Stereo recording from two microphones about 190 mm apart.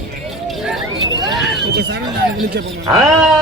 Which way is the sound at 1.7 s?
60° right (ahead or behind).